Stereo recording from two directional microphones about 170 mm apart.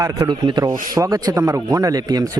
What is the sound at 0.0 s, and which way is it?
Speech, 20° right (ahead or behind).